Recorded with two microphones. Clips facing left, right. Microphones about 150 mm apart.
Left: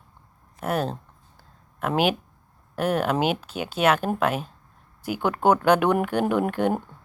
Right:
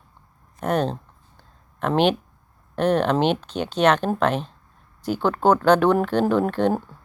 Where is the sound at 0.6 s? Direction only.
5° left (ahead or behind).